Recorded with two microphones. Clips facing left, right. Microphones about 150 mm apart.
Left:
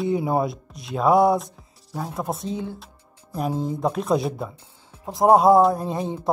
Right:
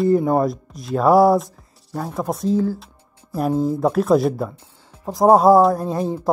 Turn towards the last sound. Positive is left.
turn(degrees=0)  # may be behind; listen again after turning